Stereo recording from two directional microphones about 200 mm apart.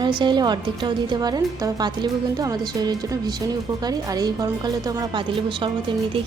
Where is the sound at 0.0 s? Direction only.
25° right (ahead or behind).